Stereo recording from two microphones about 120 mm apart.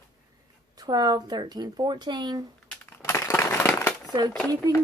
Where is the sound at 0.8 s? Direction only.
35° right (ahead or behind).